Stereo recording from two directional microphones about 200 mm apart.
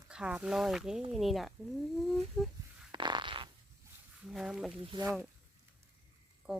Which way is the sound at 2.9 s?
20° right (ahead or behind).